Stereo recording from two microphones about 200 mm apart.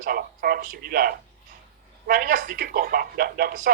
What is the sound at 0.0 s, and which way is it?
A man's voice, 45° right (ahead or behind).